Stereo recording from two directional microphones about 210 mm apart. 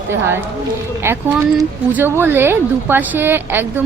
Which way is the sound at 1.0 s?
10° right (ahead or behind).